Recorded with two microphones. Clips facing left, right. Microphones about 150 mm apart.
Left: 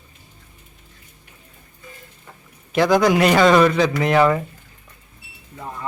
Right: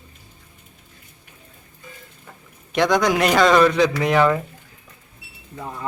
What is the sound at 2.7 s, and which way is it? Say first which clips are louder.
Speech: left 2 dB; 5° left (ahead or behind).